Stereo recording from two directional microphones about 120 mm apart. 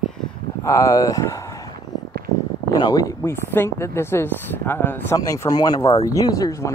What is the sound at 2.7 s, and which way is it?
Speech, 35° left (ahead or behind).